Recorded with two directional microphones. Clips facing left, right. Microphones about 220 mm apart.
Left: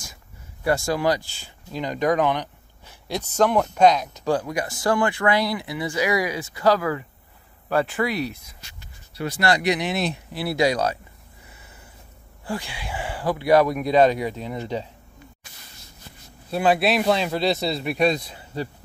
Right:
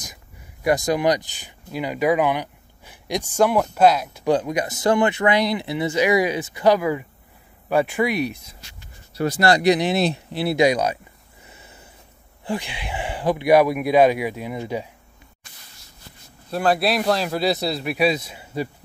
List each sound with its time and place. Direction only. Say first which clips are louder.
0.7 s speech: right 2 dB; 20° right (ahead or behind)
4.3 s speech: right 3 dB; 20° right (ahead or behind)
9.1 s speech: right 4 dB; 40° right (ahead or behind); by 11.0 s 15° right (ahead or behind)
12.4 s speech: right 3 dB; 20° right (ahead or behind)
16.4 s speech: even; 5° left (ahead or behind); by 18.7 s 10° right (ahead or behind)